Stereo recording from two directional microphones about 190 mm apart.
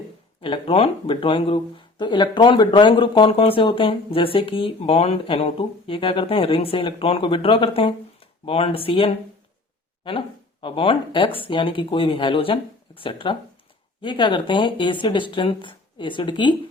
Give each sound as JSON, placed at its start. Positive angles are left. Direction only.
{"t": 0.4, "sound": "speech", "side_deg": 30}